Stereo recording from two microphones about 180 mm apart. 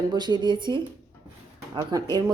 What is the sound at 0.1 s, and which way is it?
Speech, 25° right (ahead or behind).